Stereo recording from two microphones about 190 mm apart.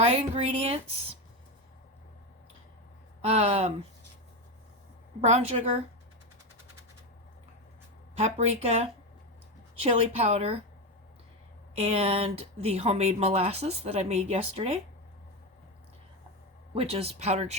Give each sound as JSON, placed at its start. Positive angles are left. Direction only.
{"t": 0.0, "sound": "speech", "side_deg": -35}
{"t": 3.2, "sound": "speech", "side_deg": -35}
{"t": 5.2, "sound": "speech", "side_deg": -35}
{"t": 8.1, "sound": "speech", "side_deg": -35}
{"t": 11.8, "sound": "speech", "side_deg": -35}
{"t": 16.7, "sound": "speech", "side_deg": -30}